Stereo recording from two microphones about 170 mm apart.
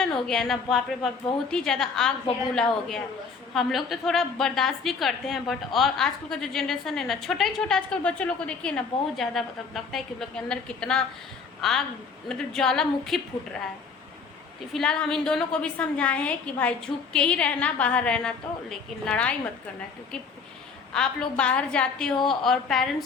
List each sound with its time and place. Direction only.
0.0 s a woman's voice: 5° left (ahead or behind)
3.5 s a woman's voice: centre (ahead or behind)
14.7 s a woman's voice: 5° left (ahead or behind)
20.9 s a woman's voice: 5° left (ahead or behind)